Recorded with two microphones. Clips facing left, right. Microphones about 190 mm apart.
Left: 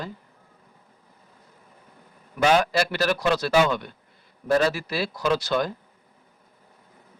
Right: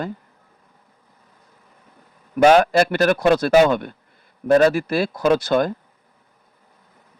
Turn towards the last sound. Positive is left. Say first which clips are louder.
# right 6 dB
turn(degrees=-50)  # may be behind; listen again after turning